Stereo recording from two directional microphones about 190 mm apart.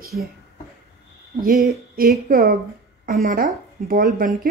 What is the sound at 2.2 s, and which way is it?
Speech, 50° right (ahead or behind).